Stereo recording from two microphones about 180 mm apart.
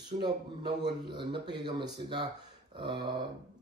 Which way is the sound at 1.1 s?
25° right (ahead or behind).